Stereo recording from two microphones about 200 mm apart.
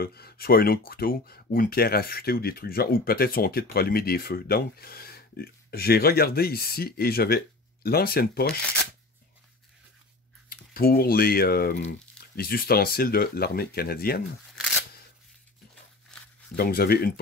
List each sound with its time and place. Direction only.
0.0 s speech: 50° left (ahead or behind)
10.7 s speech: 50° left (ahead or behind)
16.1 s a sound: 5° left (ahead or behind)
16.5 s speech: 50° left (ahead or behind)